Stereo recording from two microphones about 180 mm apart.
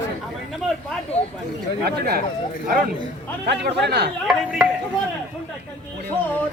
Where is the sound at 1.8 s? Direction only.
60° right (ahead or behind).